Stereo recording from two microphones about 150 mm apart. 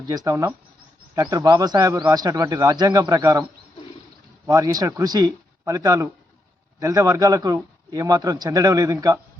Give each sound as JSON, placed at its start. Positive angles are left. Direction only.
{"t": 0.1, "sound": "a man's voice", "side_deg": -25}
{"t": 4.4, "sound": "a man's voice", "side_deg": -25}